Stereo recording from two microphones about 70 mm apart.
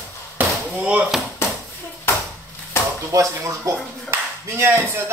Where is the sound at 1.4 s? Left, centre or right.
Left.